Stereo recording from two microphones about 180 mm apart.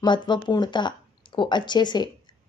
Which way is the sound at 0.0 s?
25° left (ahead or behind).